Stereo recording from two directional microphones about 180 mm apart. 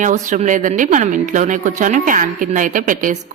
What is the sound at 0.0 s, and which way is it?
Speech, 45° right (ahead or behind).